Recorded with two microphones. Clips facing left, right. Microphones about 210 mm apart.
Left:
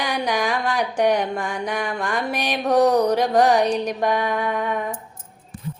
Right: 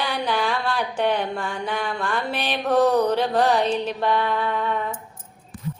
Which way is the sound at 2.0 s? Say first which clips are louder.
Left 2 dB; 15° left (ahead or behind).